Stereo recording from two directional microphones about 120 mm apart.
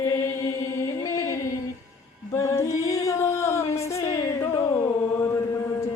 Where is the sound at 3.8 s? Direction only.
25° left (ahead or behind).